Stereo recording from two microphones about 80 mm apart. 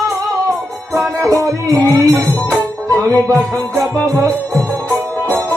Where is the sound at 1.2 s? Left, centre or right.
Right.